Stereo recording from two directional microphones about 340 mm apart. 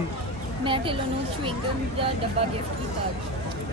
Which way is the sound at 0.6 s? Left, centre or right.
Centre.